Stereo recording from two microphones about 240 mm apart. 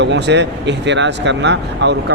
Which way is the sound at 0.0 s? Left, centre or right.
Right.